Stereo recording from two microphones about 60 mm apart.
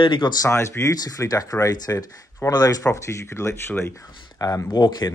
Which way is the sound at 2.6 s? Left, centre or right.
Left.